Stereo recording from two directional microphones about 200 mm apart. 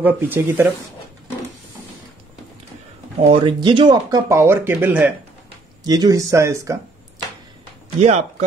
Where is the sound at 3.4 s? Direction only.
25° right (ahead or behind); by 5.1 s 10° right (ahead or behind).